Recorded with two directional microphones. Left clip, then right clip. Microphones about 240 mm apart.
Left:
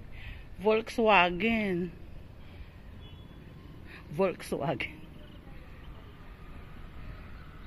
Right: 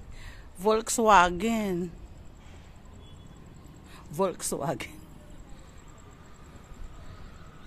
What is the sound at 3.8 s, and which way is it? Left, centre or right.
A man's voice, centre.